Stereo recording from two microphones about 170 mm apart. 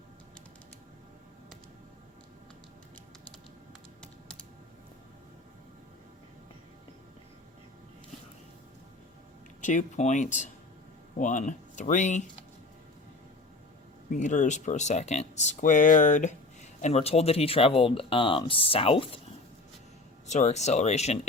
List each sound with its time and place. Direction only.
4.0 s typing: 5° left (ahead or behind)
9.6 s speech: 50° left (ahead or behind)
14.1 s speech: 45° left (ahead or behind)
20.2 s speech: 40° left (ahead or behind)